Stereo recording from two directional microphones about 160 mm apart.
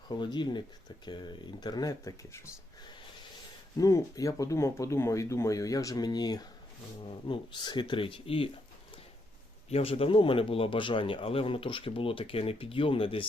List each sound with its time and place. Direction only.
0.2 s speech: 30° left (ahead or behind)
3.8 s speech: 20° left (ahead or behind)
9.6 s speech: 35° left (ahead or behind)